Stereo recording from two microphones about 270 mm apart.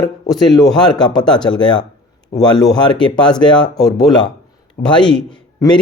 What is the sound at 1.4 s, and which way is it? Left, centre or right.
Speech, centre.